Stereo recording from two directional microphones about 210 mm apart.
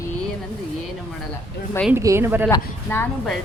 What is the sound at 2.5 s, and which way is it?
Speech, 10° left (ahead or behind).